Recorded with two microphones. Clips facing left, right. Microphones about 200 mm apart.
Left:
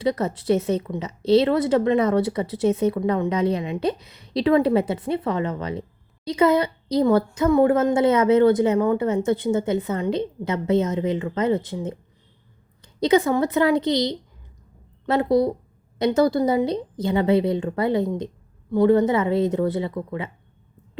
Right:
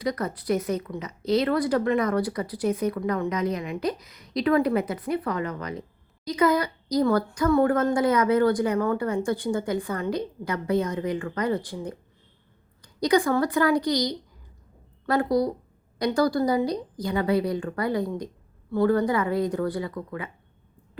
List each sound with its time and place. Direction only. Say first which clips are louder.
0.0 s a woman's voice: left 5 dB; 25° left (ahead or behind)